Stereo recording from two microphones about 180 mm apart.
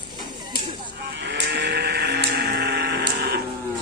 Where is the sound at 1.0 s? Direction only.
70° right (ahead or behind).